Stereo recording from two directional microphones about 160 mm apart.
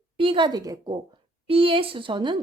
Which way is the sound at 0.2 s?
30° right (ahead or behind).